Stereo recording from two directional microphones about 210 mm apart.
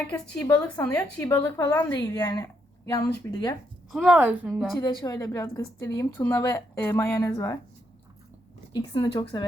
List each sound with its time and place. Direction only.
0.1 s speech: 10° left (ahead or behind)
3.9 s a woman's voice: 5° right (ahead or behind)
4.8 s speech: 20° left (ahead or behind)
8.7 s speech: 20° left (ahead or behind)